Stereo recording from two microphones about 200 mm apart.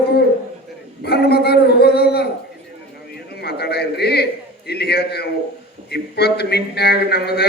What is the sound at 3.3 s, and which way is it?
A man's voice, 55° left (ahead or behind).